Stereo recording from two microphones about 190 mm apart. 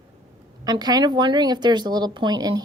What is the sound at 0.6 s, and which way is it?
Speech, 20° right (ahead or behind).